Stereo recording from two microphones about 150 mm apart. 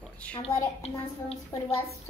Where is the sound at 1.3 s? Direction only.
40° left (ahead or behind).